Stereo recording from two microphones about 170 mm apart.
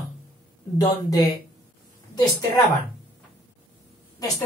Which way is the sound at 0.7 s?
20° left (ahead or behind).